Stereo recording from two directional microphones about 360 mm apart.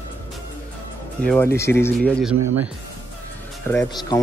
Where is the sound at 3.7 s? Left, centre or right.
Centre.